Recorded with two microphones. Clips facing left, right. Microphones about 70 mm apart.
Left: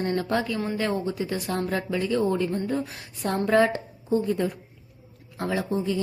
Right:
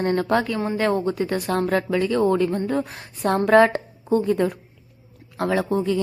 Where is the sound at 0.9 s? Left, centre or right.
Right.